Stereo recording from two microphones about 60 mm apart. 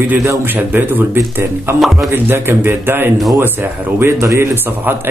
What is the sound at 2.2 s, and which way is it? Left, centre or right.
Speech, right.